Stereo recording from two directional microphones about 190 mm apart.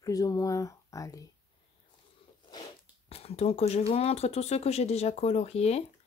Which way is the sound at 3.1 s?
30° left (ahead or behind).